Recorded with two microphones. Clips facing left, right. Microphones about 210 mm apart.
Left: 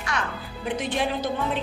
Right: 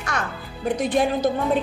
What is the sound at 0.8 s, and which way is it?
Speech, 40° right (ahead or behind).